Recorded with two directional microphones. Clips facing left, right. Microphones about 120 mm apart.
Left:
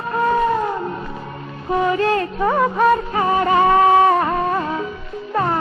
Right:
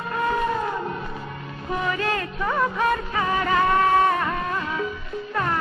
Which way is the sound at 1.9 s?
35° left (ahead or behind).